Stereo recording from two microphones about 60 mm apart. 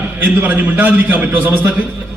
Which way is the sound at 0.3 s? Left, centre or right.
Right.